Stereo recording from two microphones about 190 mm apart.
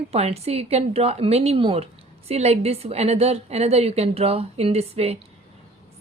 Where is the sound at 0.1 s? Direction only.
30° right (ahead or behind).